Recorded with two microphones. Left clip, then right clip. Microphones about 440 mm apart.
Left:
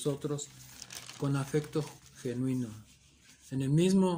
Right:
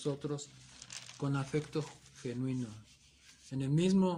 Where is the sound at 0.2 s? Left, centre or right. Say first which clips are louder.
Left 3 dB; right.